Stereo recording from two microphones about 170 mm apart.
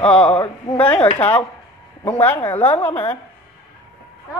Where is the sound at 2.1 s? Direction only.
10° left (ahead or behind).